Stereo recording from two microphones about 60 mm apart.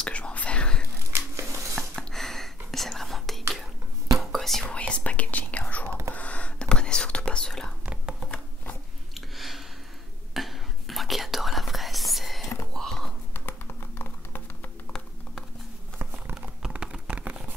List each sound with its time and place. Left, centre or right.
0.0 s whispering: centre
1.1 s a sound: right
2.1 s whispering: centre
4.6 s whispering: centre
5.9 s whispering: right
6.1 s whispering: left
7.8 s whispering: centre
9.1 s a sound: centre
10.3 s whispering: centre
12.7 s a sound: centre
13.3 s computer keyboard: left
16.7 s a sound: centre